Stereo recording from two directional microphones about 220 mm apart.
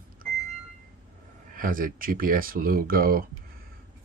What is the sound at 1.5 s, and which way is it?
Speech, 40° right (ahead or behind).